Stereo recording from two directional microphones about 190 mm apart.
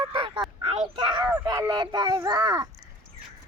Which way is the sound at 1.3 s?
15° right (ahead or behind).